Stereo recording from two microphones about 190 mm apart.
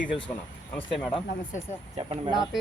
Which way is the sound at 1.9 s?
30° right (ahead or behind).